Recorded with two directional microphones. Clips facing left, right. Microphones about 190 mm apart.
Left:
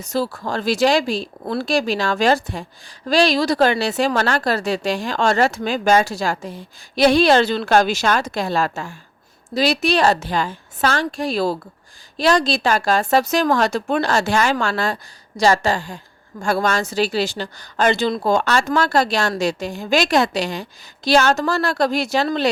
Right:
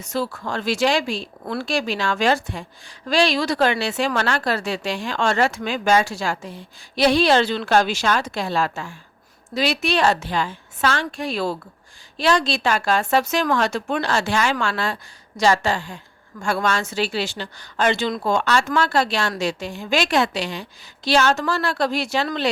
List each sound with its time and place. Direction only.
0.0 s a woman's voice: 35° left (ahead or behind)